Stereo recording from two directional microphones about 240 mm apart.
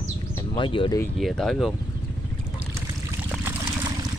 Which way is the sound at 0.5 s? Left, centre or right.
Left.